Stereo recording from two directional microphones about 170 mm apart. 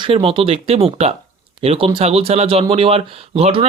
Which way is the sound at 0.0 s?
35° right (ahead or behind).